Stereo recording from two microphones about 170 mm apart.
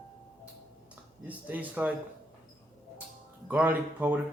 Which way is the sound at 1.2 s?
10° right (ahead or behind).